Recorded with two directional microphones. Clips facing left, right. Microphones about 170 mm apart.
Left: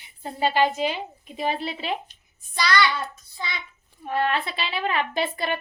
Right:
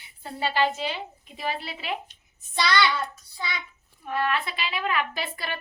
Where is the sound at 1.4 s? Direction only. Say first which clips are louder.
Left 5 dB; 25° left (ahead or behind).